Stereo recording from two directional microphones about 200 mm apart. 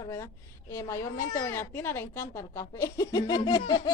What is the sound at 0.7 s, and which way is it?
A child's voice, 15° left (ahead or behind).